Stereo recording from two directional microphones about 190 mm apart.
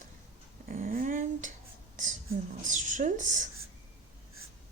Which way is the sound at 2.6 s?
40° right (ahead or behind).